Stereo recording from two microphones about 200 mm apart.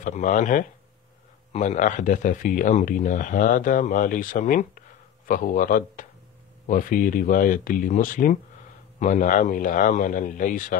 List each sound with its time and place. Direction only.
0.0 s speech: 40° left (ahead or behind)